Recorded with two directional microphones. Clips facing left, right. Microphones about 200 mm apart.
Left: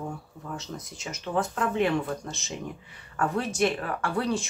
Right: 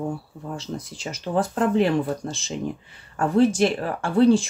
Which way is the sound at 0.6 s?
30° right (ahead or behind).